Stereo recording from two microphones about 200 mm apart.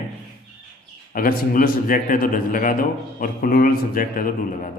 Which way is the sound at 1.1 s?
45° left (ahead or behind).